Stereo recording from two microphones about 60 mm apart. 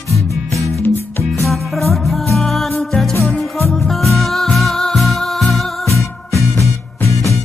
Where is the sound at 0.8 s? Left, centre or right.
Left.